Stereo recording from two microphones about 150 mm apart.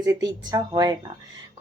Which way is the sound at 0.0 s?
25° right (ahead or behind).